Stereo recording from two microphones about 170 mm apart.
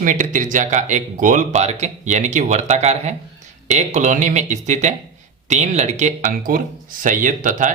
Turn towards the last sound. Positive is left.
turn(degrees=-50)  # may be behind; listen again after turning